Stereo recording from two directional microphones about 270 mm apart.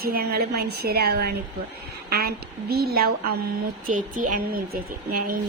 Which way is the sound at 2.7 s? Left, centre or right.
Right.